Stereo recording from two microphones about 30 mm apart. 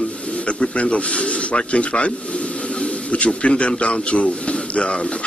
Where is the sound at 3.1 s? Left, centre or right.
Left.